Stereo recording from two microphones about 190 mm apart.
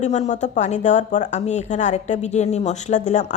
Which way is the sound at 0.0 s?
35° left (ahead or behind).